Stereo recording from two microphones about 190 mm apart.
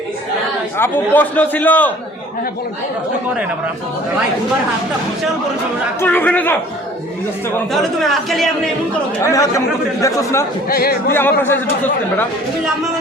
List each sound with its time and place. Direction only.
0.8 s a man's voice: 10° left (ahead or behind)
6.0 s a man's voice: 10° left (ahead or behind)
7.7 s a man's voice: centre (ahead or behind)
9.2 s a man's voice: 20° left (ahead or behind)
10.7 s speech: 55° left (ahead or behind)
11.1 s a man's voice: 10° left (ahead or behind)